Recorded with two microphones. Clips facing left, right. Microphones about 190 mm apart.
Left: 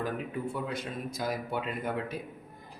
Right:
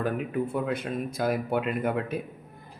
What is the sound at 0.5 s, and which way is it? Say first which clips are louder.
Speech: right 6 dB; 55° right (ahead or behind).